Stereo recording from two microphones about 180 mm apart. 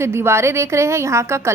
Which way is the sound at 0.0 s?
15° right (ahead or behind).